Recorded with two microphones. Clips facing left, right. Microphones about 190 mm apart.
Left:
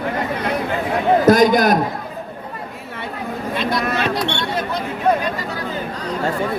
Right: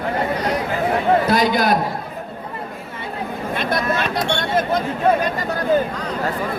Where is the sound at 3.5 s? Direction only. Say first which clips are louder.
Even; 50° right (ahead or behind).